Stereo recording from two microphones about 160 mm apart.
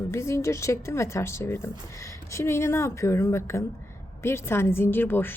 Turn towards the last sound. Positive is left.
turn(degrees=15)  # may be behind; listen again after turning